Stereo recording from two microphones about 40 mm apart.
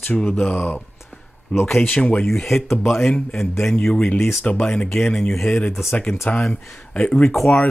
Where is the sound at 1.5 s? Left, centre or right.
Left.